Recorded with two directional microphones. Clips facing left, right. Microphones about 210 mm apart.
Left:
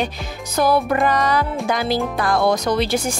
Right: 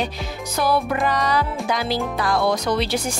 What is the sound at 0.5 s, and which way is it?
A woman's voice, 45° left (ahead or behind).